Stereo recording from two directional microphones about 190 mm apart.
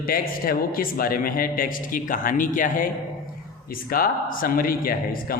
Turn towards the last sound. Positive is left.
turn(degrees=50)  # may be behind; listen again after turning